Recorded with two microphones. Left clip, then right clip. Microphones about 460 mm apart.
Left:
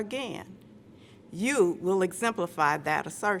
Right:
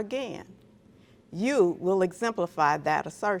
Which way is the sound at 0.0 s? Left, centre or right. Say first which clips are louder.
Right 2 dB; right.